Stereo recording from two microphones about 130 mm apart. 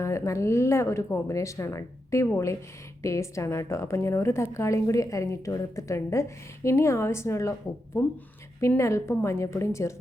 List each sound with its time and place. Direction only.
0.0 s a woman's voice: 20° left (ahead or behind)
8.6 s a woman's voice: 20° left (ahead or behind)